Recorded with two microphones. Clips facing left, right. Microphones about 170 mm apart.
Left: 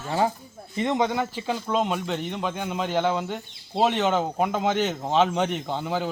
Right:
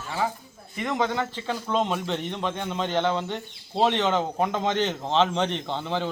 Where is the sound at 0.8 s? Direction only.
20° left (ahead or behind).